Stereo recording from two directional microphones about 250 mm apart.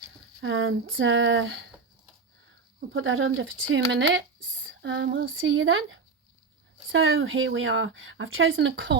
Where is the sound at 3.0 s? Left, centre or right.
Right.